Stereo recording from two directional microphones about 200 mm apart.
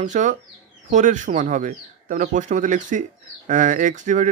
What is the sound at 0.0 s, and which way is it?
Speech, 40° right (ahead or behind).